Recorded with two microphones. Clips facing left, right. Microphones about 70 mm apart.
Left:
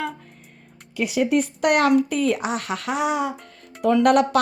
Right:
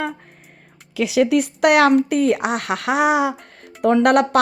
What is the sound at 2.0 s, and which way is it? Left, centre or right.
Speech, right.